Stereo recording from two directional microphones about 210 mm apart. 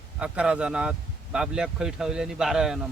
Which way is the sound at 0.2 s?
5° right (ahead or behind).